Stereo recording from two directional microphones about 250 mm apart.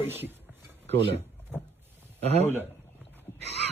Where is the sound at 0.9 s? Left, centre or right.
Right.